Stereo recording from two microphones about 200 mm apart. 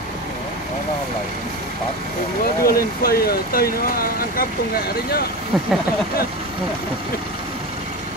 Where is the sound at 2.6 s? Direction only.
50° left (ahead or behind).